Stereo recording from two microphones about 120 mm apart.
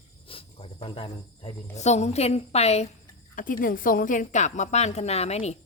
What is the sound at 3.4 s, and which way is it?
A woman's voice, 90° left.